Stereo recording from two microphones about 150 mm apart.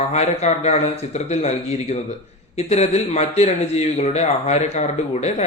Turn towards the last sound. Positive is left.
turn(degrees=45)  # may be behind; listen again after turning